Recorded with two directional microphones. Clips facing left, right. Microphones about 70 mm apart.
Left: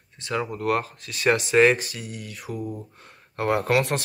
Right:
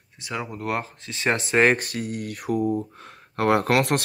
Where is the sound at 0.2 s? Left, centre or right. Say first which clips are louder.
Left 3 dB; centre; by 2.7 s right.